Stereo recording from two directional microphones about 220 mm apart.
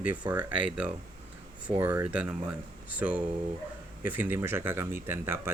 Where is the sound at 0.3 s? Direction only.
5° right (ahead or behind).